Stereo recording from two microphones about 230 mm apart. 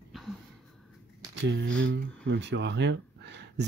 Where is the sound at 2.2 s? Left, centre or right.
Right.